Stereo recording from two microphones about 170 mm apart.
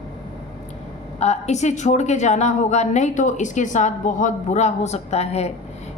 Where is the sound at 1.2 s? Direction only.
40° left (ahead or behind).